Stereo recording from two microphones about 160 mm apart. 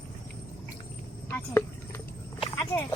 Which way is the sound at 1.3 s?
15° left (ahead or behind).